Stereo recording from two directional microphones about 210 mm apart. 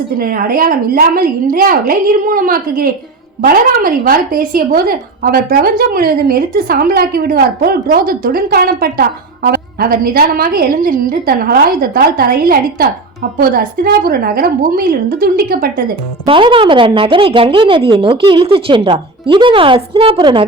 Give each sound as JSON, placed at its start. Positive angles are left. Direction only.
{"t": 0.2, "sound": "speech", "side_deg": -45}
{"t": 16.2, "sound": "a woman's voice", "side_deg": -25}